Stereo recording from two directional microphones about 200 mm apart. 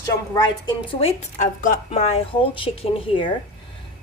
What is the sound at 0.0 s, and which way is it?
A woman's voice, 20° left (ahead or behind).